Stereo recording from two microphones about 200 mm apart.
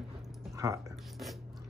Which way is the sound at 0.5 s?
15° right (ahead or behind).